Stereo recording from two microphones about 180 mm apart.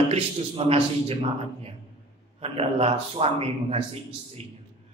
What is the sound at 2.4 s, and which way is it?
A man's voice, 35° right (ahead or behind).